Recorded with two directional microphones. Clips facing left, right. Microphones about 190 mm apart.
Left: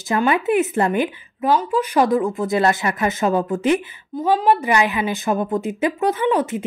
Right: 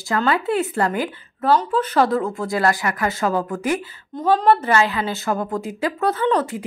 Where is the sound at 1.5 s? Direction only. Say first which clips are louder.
Even; 10° left (ahead or behind).